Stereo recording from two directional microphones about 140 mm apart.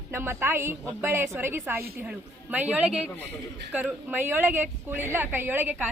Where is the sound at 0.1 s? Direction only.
15° right (ahead or behind).